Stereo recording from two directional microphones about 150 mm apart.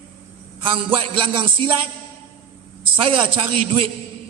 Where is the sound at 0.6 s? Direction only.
35° right (ahead or behind).